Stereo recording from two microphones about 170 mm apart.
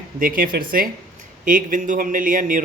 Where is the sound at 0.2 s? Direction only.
55° right (ahead or behind).